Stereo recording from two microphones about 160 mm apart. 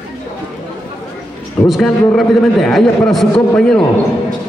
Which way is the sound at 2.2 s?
Centre (ahead or behind).